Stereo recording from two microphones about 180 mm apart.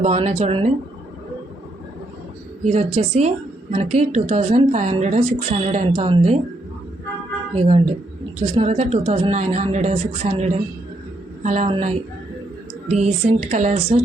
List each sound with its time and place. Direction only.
0.0 s a woman's voice: 40° right (ahead or behind)
2.6 s a woman's voice: 35° right (ahead or behind)
7.5 s a woman's voice: 35° right (ahead or behind)
12.9 s a woman's voice: 40° right (ahead or behind)